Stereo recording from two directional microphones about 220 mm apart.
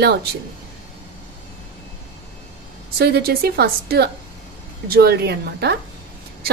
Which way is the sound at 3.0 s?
45° right (ahead or behind).